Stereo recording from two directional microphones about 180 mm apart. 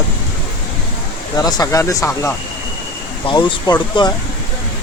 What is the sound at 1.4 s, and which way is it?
Speech, 20° left (ahead or behind).